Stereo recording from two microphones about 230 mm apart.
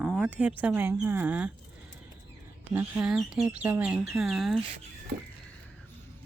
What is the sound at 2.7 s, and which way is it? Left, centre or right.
Speech, centre.